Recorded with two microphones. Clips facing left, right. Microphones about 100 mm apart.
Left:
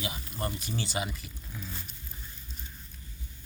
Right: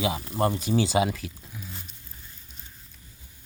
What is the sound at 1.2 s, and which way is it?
Speech, 90° right.